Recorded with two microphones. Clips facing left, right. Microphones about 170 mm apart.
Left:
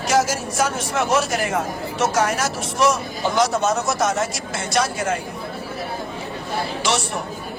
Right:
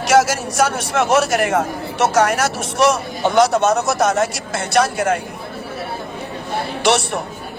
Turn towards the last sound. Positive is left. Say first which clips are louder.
# right 6 dB
turn(degrees=-65)  # may be behind; listen again after turning